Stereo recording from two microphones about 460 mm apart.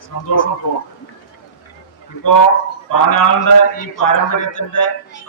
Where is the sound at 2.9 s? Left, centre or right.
Left.